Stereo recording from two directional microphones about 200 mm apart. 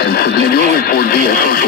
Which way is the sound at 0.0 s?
50° left (ahead or behind).